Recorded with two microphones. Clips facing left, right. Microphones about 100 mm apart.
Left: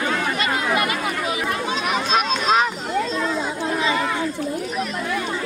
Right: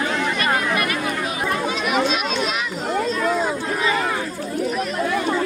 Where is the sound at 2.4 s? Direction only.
45° left (ahead or behind).